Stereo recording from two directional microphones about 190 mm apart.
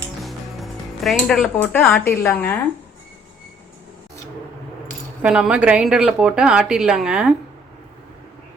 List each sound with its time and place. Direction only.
0.2 s music: centre (ahead or behind)
2.0 s a woman's voice: 10° left (ahead or behind)
5.2 s speech: 5° right (ahead or behind)